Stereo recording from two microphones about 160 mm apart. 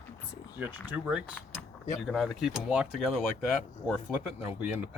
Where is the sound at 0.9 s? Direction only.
5° right (ahead or behind).